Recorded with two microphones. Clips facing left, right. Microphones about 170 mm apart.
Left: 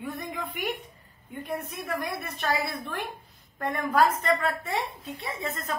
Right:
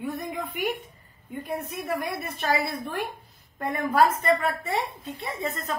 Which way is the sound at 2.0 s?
Centre (ahead or behind).